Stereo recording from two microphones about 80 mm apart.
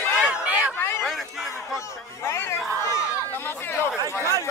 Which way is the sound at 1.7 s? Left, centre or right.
Left.